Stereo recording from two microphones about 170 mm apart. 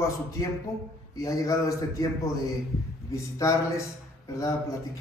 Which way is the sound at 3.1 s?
20° left (ahead or behind).